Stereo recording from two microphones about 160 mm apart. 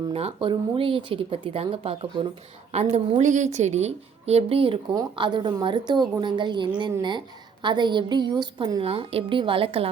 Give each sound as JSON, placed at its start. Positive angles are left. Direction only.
{"t": 0.1, "sound": "a woman's voice", "side_deg": -40}
{"t": 2.9, "sound": "a woman's voice", "side_deg": -50}